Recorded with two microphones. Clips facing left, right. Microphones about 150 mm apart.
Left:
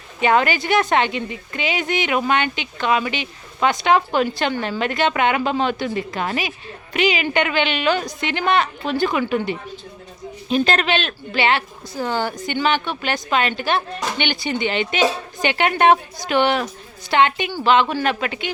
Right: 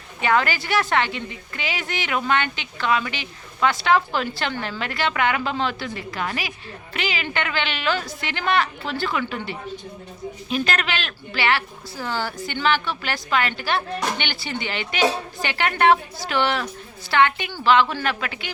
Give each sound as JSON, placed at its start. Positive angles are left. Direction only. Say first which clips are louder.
{"t": 0.2, "sound": "a woman's voice", "louder": "left 4 dB", "side_deg": 20}
{"t": 10.5, "sound": "a woman's voice", "louder": "left 6 dB", "side_deg": 30}